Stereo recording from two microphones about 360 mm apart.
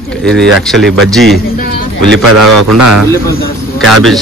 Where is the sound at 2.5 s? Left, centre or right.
Right.